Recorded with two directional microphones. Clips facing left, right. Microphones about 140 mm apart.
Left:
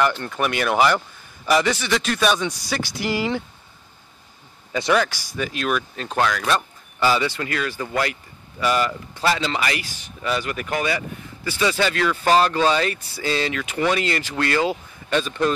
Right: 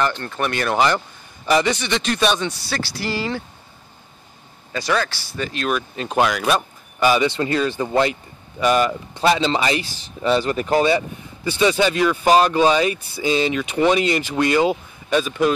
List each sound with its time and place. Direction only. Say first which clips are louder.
0.0 s a man's voice: left 1 dB; 10° left (ahead or behind)
4.7 s a man's voice: left 2 dB; 15° left (ahead or behind)
5.9 s speech: right 3 dB; 15° right (ahead or behind)